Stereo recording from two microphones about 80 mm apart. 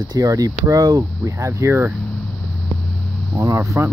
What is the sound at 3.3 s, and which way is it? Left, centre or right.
Speech, right.